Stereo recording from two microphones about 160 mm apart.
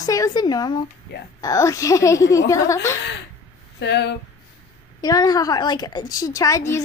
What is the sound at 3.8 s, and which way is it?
Speech, 90° left.